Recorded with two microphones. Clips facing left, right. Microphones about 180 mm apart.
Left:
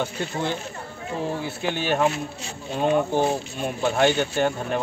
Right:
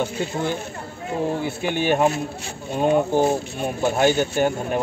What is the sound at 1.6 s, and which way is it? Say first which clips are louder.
Speech: right 3 dB; 15° right (ahead or behind).